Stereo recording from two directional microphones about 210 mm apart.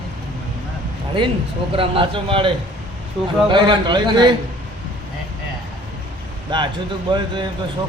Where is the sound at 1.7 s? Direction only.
25° right (ahead or behind).